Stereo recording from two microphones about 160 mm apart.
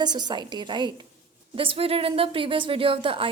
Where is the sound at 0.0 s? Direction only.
25° right (ahead or behind).